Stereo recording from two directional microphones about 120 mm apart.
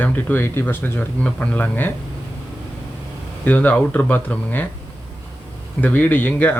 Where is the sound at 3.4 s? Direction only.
15° left (ahead or behind).